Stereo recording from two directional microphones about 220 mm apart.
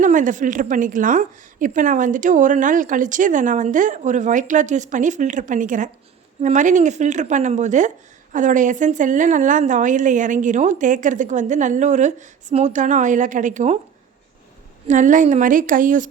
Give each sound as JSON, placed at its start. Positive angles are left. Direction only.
{"t": 0.0, "sound": "a woman's voice", "side_deg": -35}
{"t": 14.8, "sound": "a woman's voice", "side_deg": -35}